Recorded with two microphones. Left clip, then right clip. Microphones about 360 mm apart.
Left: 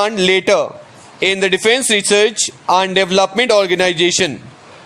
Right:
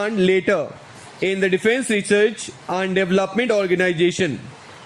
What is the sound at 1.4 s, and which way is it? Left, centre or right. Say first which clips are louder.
A man's voice: left 4 dB; centre.